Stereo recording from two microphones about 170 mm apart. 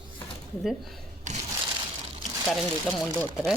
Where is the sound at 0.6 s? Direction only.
Centre (ahead or behind).